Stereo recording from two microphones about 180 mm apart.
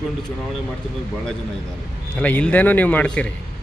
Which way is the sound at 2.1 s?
10° left (ahead or behind).